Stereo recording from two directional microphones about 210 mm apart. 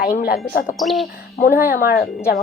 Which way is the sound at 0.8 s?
Centre (ahead or behind).